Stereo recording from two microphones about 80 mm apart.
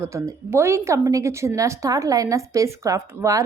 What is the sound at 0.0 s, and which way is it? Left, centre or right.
A woman's voice, right.